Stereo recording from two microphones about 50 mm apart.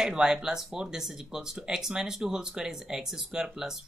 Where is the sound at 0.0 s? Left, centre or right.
Centre.